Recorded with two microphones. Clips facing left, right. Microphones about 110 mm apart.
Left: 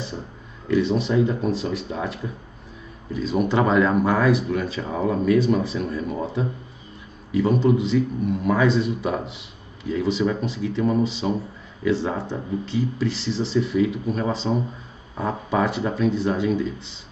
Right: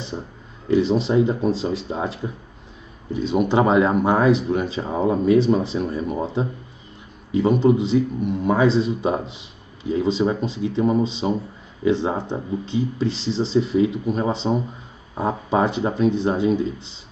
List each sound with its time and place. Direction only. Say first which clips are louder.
0.7 s speech: right 2 dB; 30° right (ahead or behind)
7.3 s speech: right 2 dB; 25° right (ahead or behind)